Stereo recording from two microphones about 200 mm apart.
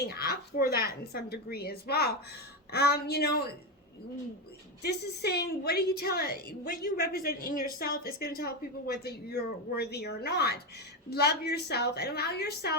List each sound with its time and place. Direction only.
0.0 s speech: 50° left (ahead or behind)
2.7 s a sound: 55° left (ahead or behind)
4.8 s speech: 55° left (ahead or behind)